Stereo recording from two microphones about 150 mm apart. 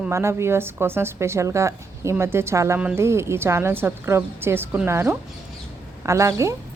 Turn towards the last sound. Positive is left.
turn(degrees=-20)  # may be behind; listen again after turning